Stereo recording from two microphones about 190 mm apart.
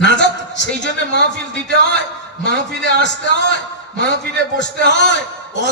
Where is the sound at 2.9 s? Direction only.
70° left (ahead or behind).